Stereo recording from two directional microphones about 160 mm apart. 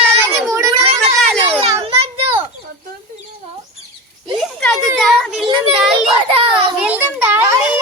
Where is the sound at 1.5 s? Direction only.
40° right (ahead or behind).